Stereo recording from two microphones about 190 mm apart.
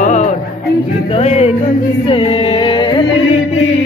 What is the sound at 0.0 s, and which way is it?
Music, 40° left (ahead or behind).